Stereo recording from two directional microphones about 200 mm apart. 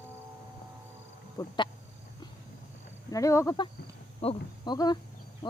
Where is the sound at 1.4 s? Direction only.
15° left (ahead or behind).